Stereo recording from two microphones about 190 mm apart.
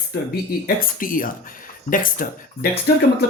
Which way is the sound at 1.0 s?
45° left (ahead or behind).